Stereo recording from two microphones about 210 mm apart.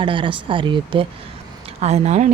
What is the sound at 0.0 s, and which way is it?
Speech, 25° right (ahead or behind).